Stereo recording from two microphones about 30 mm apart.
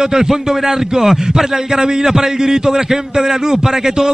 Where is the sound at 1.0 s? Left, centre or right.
Centre.